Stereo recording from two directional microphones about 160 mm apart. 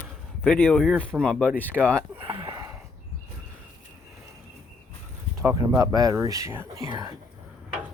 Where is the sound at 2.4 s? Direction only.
20° right (ahead or behind).